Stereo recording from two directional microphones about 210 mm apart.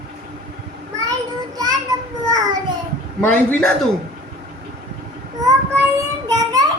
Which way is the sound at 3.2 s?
5° left (ahead or behind).